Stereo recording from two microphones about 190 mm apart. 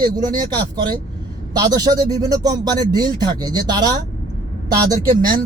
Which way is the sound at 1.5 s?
20° right (ahead or behind).